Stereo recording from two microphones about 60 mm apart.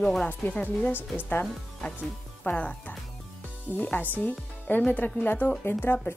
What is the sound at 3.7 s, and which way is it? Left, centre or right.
A woman's voice, left.